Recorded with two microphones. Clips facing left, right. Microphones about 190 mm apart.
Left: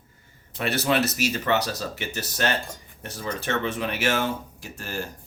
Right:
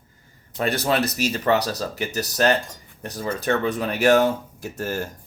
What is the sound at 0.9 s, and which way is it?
Speech, 35° right (ahead or behind).